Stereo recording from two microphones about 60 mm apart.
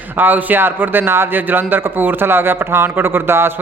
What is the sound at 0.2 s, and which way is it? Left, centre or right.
A man's voice, right.